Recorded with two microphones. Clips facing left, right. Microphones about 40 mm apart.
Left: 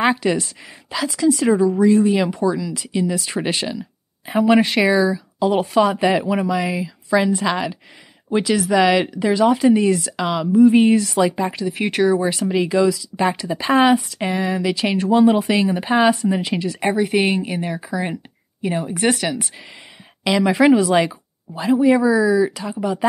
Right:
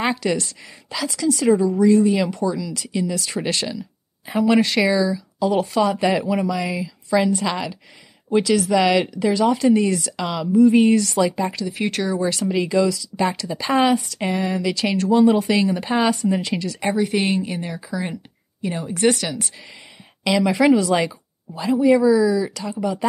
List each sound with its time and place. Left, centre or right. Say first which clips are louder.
0.0 s a woman's voice: left 3 dB; centre
2.5 s a woman's voice: left 2 dB; centre
4.6 s a woman's voice: left 2 dB; centre
8.3 s a woman's voice: even; left; by 14.6 s centre
14.6 s a woman's voice: left 1 dB; centre
21.5 s a woman's voice: left 1 dB; centre